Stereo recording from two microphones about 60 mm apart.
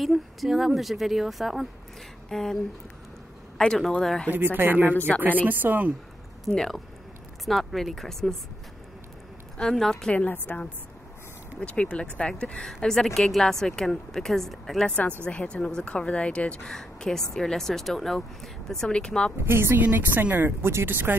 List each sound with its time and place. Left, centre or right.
0.0 s speech: centre
4.3 s speech: right
6.5 s speech: centre
9.6 s speech: centre
10.1 s a woman's voice: left; by 14.9 s centre
14.9 s a woman's voice: left
19.4 s speech: right
19.8 s speech: right